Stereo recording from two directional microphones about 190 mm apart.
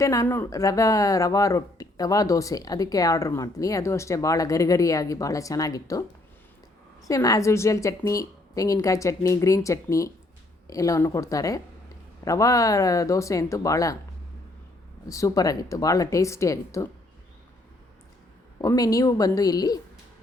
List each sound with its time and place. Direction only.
0.0 s speech: 15° left (ahead or behind)
7.1 s speech: 15° left (ahead or behind)
15.0 s speech: 15° left (ahead or behind)
18.6 s a woman's voice: 20° left (ahead or behind)